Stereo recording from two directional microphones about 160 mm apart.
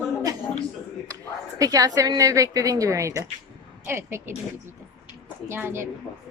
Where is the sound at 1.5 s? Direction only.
20° right (ahead or behind).